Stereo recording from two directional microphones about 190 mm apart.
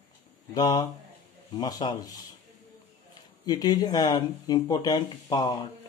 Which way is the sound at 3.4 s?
20° left (ahead or behind).